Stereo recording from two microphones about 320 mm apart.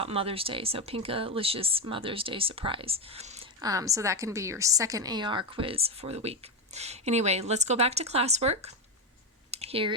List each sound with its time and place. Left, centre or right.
0.0 s speech: centre
9.5 s clicking: centre